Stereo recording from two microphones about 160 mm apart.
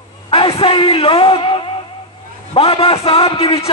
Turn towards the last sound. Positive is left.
turn(degrees=35)  # may be behind; listen again after turning